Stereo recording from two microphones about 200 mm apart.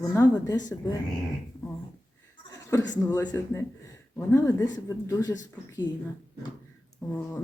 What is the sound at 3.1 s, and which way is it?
Speech, 15° left (ahead or behind).